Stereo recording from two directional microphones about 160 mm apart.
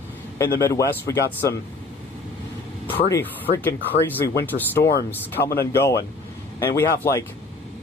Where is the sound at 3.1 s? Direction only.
15° left (ahead or behind).